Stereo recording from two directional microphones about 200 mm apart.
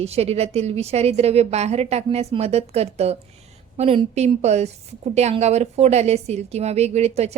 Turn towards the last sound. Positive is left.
turn(degrees=-30)  # may be behind; listen again after turning